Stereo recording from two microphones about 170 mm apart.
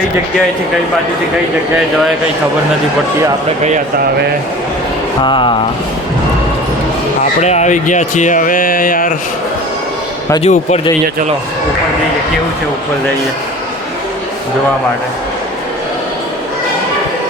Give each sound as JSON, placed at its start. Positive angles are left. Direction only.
{"t": 5.2, "sound": "a sound", "side_deg": 30}
{"t": 7.4, "sound": "speech", "side_deg": 40}
{"t": 10.4, "sound": "speech", "side_deg": 40}